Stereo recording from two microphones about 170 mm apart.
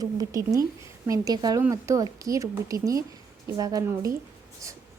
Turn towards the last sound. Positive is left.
turn(degrees=-15)  # may be behind; listen again after turning